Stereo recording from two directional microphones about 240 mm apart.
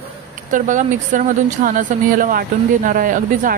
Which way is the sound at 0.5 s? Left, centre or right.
Right.